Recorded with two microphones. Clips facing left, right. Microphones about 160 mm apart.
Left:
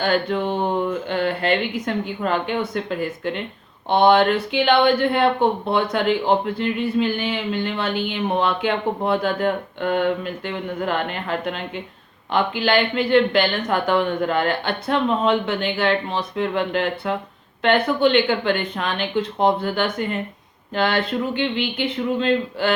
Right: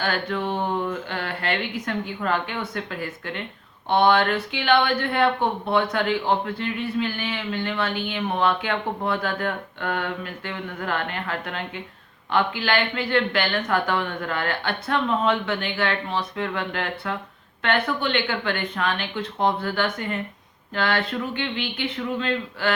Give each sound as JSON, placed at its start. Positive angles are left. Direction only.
{"t": 0.0, "sound": "speech", "side_deg": 20}